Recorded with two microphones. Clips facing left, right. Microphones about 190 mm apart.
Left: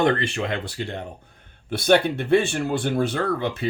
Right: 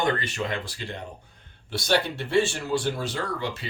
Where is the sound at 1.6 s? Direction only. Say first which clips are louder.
Left 6 dB; 55° left (ahead or behind).